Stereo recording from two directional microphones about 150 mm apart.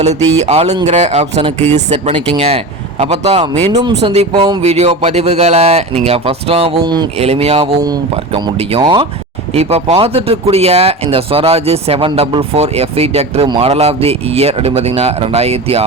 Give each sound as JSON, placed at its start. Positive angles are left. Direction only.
{"t": 0.2, "sound": "a sound", "side_deg": 10}
{"t": 0.4, "sound": "speech", "side_deg": -45}
{"t": 7.2, "sound": "speech", "side_deg": -40}
{"t": 9.5, "sound": "speech", "side_deg": -45}